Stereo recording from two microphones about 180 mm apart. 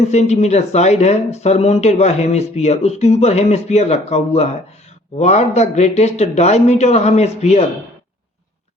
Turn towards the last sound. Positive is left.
turn(degrees=40)  # may be behind; listen again after turning